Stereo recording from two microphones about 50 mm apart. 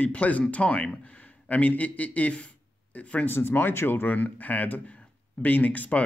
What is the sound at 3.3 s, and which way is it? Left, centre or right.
Speech, left.